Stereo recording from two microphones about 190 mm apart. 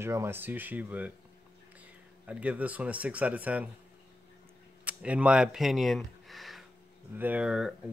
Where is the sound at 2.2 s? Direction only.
5° right (ahead or behind).